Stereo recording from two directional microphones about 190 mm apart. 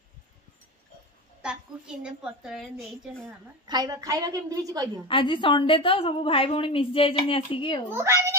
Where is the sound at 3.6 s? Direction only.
20° right (ahead or behind).